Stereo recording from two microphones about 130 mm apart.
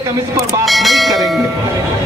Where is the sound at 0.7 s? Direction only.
Centre (ahead or behind).